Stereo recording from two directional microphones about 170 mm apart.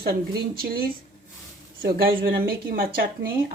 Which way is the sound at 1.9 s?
60° right (ahead or behind).